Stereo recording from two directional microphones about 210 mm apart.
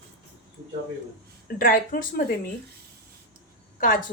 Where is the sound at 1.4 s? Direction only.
40° left (ahead or behind).